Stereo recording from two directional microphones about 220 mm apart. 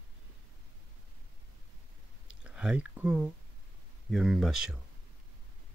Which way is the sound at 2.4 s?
5° right (ahead or behind).